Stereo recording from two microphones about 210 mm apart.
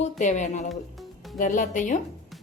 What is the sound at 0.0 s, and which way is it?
Speech, 35° left (ahead or behind).